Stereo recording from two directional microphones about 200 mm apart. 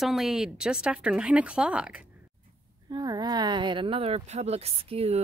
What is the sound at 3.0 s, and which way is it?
Speech, 20° right (ahead or behind).